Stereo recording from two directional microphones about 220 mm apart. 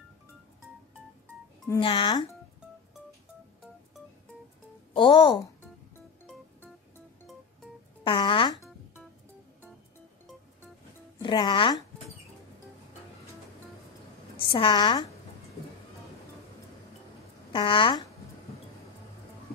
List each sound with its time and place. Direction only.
1.8 s speech: 25° left (ahead or behind)
4.9 s speech: 20° left (ahead or behind)
8.0 s a child's voice: 25° left (ahead or behind)
11.1 s speech: 20° left (ahead or behind)
14.3 s a woman's voice: 25° left (ahead or behind)
17.5 s speech: 20° left (ahead or behind)